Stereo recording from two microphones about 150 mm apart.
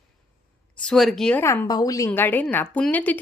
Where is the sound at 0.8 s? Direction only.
Centre (ahead or behind).